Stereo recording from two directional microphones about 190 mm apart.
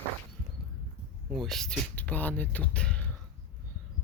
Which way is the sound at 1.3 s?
Centre (ahead or behind).